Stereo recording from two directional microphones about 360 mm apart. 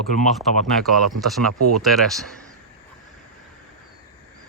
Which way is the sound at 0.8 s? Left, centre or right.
Centre.